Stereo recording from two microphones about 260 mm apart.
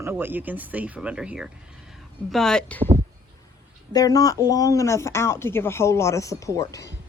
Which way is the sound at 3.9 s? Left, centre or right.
Centre.